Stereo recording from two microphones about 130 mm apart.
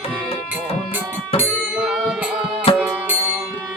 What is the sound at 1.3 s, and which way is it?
Music, 50° left (ahead or behind).